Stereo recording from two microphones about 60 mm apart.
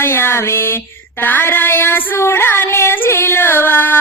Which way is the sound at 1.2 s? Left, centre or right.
Left.